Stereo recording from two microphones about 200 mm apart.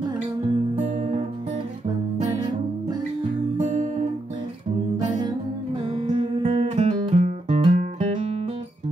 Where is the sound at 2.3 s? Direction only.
20° right (ahead or behind).